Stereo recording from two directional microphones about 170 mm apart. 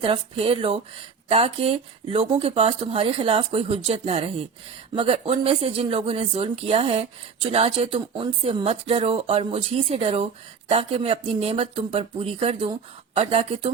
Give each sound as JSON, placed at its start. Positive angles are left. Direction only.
{"t": 0.0, "sound": "speech", "side_deg": -30}